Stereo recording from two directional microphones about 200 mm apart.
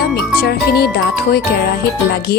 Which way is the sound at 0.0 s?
55° left (ahead or behind).